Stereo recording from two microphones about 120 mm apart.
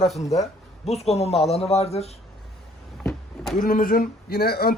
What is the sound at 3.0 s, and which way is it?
Power windows, 5° left (ahead or behind).